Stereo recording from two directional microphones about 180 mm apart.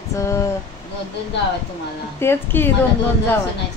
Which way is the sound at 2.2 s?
10° left (ahead or behind).